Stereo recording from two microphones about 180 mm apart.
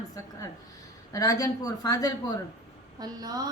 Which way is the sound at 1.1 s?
20° left (ahead or behind).